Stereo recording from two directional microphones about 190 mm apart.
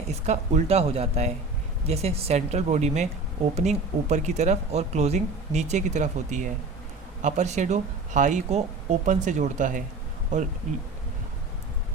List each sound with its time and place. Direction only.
0.3 s speech: 35° right (ahead or behind)